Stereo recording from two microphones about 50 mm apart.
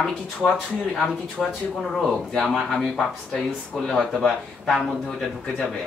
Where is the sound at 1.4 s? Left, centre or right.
Centre.